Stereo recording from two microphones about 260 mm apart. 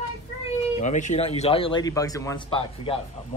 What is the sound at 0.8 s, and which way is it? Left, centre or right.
A woman's voice, left.